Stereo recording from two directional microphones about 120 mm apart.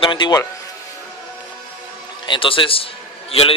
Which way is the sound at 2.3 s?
45° left (ahead or behind).